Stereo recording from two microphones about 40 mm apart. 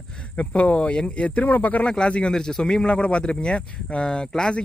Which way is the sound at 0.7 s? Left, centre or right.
Left.